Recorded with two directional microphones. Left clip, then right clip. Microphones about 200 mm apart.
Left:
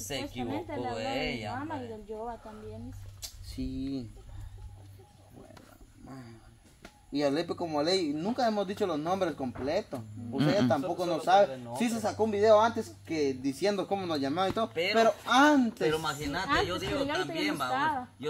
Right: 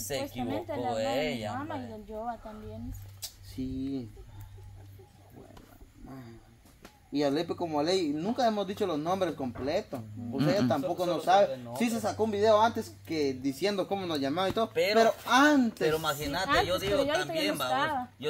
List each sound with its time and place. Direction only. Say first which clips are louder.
0.1 s a woman's voice: right 2 dB; 30° right (ahead or behind)
3.4 s speech: right 1 dB; 25° left (ahead or behind)
6.0 s speech: even; 15° left (ahead or behind); by 15.7 s centre (ahead or behind)
15.8 s a woman's voice: right 1 dB; 40° right (ahead or behind)